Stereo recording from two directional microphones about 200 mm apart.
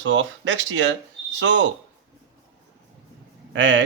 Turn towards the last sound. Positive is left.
turn(degrees=-65)  # may be behind; listen again after turning